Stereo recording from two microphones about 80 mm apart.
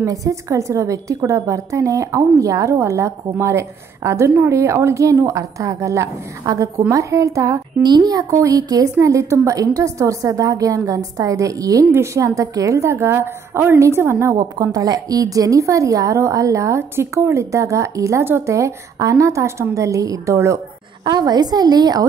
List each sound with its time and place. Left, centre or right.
0.0 s a woman's voice: right
7.8 s a woman's voice: right
14.3 s a woman's voice: right
21.0 s a woman's voice: right